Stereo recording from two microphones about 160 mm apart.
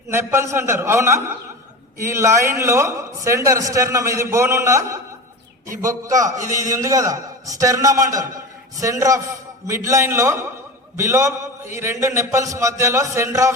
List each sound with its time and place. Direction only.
0.1 s a man's voice: 15° right (ahead or behind)
6.2 s a man's voice: 50° right (ahead or behind)
6.7 s a man's voice: 20° right (ahead or behind)